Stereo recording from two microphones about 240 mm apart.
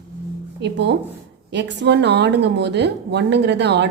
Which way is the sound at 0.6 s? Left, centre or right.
Right.